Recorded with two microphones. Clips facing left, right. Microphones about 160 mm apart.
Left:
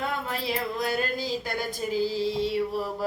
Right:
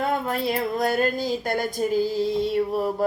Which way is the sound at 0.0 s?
50° right (ahead or behind).